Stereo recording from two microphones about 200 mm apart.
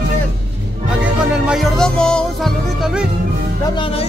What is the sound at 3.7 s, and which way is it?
Music, 30° left (ahead or behind).